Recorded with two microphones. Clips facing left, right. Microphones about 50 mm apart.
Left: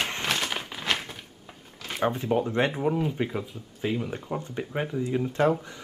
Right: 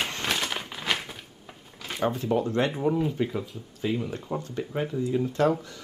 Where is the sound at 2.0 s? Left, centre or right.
Left.